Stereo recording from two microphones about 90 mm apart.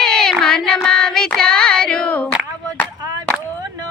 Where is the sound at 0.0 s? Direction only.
5° left (ahead or behind).